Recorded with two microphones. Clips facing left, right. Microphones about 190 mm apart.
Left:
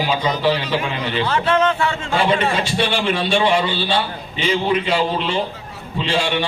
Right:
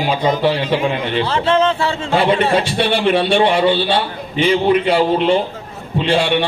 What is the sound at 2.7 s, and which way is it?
A man's voice, 60° right (ahead or behind).